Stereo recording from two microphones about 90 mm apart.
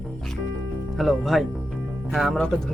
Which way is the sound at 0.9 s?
Centre (ahead or behind).